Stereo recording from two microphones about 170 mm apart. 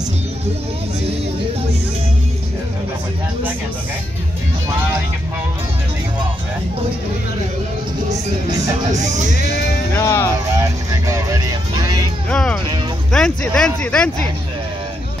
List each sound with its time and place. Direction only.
9.9 s music: 15° left (ahead or behind)
10.6 s music: 15° right (ahead or behind)
12.3 s speech: 5° left (ahead or behind)